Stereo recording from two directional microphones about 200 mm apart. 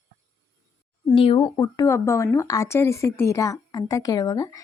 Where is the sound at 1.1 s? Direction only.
25° left (ahead or behind).